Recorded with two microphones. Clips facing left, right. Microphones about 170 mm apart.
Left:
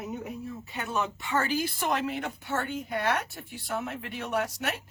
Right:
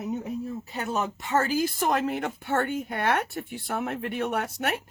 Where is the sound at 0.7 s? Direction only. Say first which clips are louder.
Right 1 dB; 40° right (ahead or behind).